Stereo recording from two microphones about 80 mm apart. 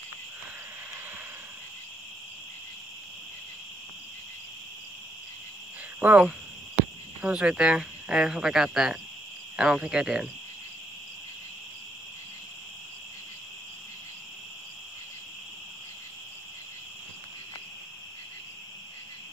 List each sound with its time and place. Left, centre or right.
5.9 s speech: centre